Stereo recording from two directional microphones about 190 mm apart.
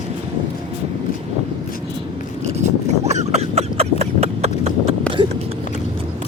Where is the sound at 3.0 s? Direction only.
35° right (ahead or behind).